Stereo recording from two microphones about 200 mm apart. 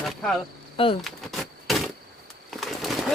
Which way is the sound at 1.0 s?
Centre (ahead or behind).